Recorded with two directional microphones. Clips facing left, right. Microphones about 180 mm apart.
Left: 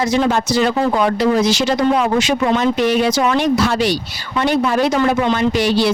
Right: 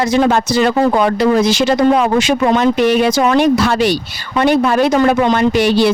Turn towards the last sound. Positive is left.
turn(degrees=-60)  # may be behind; listen again after turning